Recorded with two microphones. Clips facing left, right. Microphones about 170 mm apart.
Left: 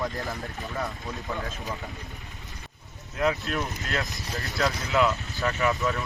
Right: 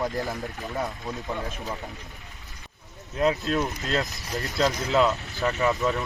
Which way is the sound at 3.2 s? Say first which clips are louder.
Right 3 dB; 20° right (ahead or behind).